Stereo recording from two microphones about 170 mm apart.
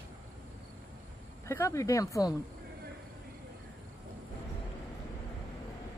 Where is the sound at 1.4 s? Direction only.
15° left (ahead or behind).